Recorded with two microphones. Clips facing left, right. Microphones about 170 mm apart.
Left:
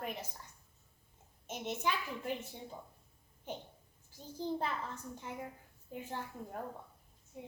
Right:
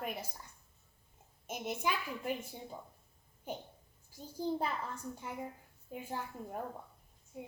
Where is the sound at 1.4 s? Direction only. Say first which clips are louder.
Even; 10° right (ahead or behind).